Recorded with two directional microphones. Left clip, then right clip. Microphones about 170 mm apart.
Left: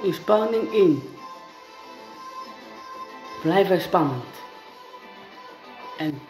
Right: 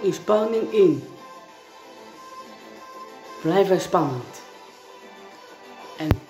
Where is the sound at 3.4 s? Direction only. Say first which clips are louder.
Even; 15° right (ahead or behind).